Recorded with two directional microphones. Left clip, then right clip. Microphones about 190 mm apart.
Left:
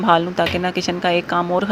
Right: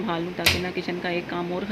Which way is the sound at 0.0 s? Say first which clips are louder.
Left 9 dB; 40° left (ahead or behind).